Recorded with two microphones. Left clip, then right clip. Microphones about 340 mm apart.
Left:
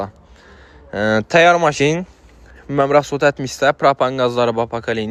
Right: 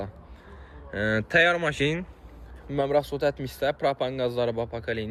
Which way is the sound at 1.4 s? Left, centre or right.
Centre.